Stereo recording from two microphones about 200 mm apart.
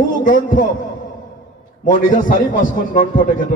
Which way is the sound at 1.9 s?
40° left (ahead or behind).